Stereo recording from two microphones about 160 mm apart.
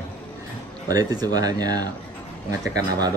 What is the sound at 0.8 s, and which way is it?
Speech, 25° right (ahead or behind).